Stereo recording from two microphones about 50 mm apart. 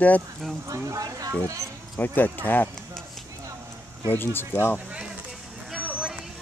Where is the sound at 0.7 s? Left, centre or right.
Right.